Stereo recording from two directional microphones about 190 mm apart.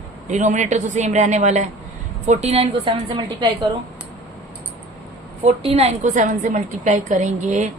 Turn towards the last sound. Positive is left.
turn(degrees=-40)  # may be behind; listen again after turning